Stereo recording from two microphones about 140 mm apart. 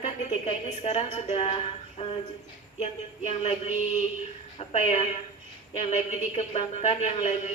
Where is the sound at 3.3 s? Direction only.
45° left (ahead or behind).